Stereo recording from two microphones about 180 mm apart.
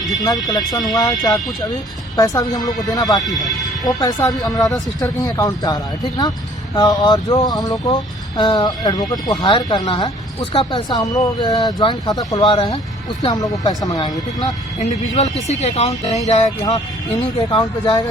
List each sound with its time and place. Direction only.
0.3 s speech: 20° left (ahead or behind)
3.2 s speech: centre (ahead or behind)
3.6 s speech: 20° left (ahead or behind)
4.3 s speech: centre (ahead or behind)
4.9 s speech: 20° left (ahead or behind)
14.8 s speech: 40° left (ahead or behind)
17.5 s speech: 25° left (ahead or behind)